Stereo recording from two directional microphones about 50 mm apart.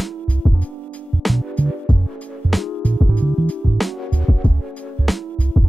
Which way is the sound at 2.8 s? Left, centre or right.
Left.